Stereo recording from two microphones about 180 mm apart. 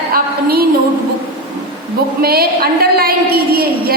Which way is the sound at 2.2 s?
60° right (ahead or behind).